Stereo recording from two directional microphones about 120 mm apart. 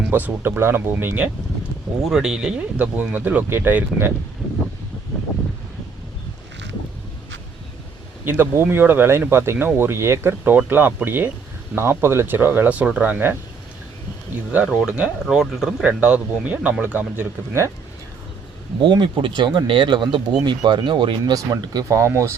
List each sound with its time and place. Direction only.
0.1 s speech: 15° right (ahead or behind)
8.2 s speech: 20° right (ahead or behind)
14.5 s speech: 10° right (ahead or behind)
18.8 s speech: 40° right (ahead or behind); by 22.4 s 25° right (ahead or behind)